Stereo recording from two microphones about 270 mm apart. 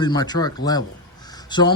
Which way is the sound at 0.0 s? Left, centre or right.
Centre.